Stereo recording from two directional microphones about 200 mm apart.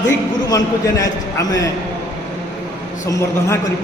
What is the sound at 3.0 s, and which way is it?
Speech, 15° left (ahead or behind).